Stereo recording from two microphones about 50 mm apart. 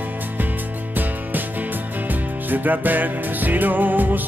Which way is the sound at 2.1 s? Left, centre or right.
Right.